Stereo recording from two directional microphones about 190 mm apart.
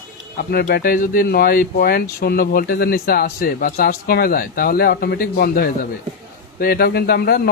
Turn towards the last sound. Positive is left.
turn(degrees=55)  # may be behind; listen again after turning